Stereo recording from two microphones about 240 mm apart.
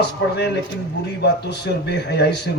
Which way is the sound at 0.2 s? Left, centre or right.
Left.